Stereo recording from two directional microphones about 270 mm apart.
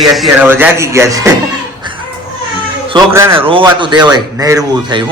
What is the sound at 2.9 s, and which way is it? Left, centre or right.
Speech, centre.